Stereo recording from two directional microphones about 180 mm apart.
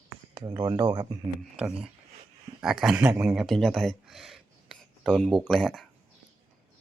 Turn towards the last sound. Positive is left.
turn(degrees=0)  # may be behind; listen again after turning